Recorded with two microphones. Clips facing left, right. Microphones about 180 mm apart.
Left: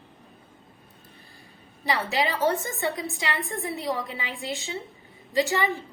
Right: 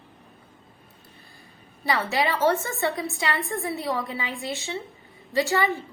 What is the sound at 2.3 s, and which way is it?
A woman's voice, 20° left (ahead or behind).